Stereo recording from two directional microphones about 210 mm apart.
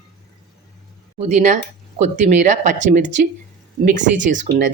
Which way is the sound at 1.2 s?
35° right (ahead or behind).